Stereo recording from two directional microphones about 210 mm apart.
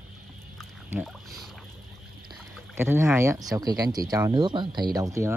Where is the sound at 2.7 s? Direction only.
10° right (ahead or behind).